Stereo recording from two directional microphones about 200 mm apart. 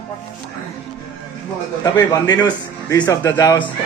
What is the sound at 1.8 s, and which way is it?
A man's voice, 20° left (ahead or behind).